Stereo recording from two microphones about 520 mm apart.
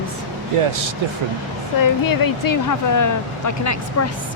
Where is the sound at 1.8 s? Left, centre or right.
Left.